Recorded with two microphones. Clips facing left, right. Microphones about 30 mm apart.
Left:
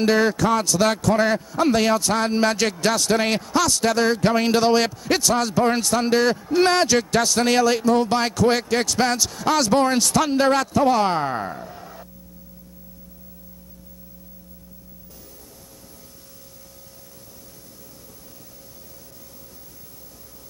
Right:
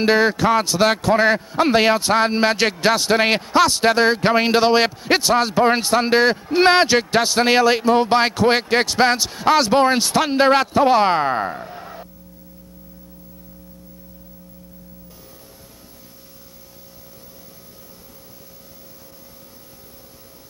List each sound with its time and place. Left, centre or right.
0.0 s a man's voice: right